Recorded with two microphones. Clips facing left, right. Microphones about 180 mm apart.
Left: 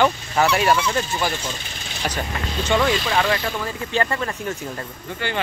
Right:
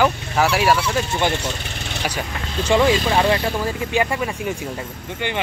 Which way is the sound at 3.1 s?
25° right (ahead or behind).